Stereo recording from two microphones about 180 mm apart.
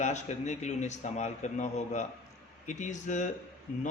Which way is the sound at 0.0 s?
40° left (ahead or behind).